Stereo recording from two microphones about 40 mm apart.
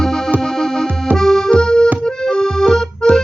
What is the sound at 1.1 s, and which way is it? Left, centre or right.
Accordion, centre.